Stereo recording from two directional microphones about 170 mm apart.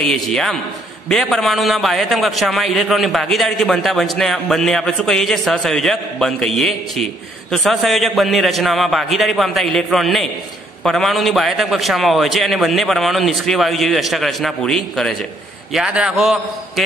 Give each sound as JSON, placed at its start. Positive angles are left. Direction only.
{"t": 0.0, "sound": "a man's voice", "side_deg": 5}